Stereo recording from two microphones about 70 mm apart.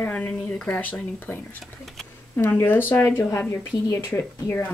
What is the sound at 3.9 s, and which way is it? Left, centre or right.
Speech, left.